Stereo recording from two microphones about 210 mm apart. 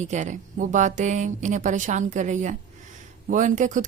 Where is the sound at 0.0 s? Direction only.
35° right (ahead or behind).